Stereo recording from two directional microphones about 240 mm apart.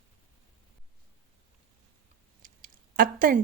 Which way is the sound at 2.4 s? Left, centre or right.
Right.